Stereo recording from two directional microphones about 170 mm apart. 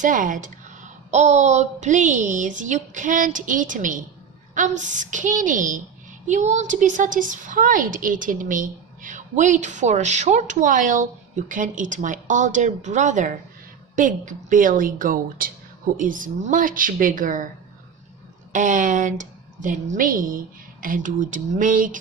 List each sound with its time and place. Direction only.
0.0 s a woman's voice: 50° right (ahead or behind)
18.5 s a woman's voice: 50° right (ahead or behind)